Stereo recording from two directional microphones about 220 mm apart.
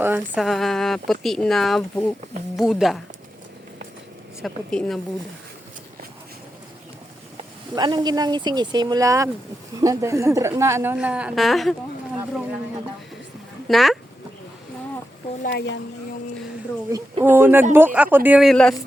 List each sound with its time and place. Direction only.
0.3 s speech: centre (ahead or behind)
4.4 s speech: centre (ahead or behind)
7.8 s a woman's voice: 20° right (ahead or behind); by 11.8 s centre (ahead or behind)
13.7 s speech: centre (ahead or behind)
15.4 s speech: 50° left (ahead or behind)
16.9 s a woman's voice: 10° right (ahead or behind)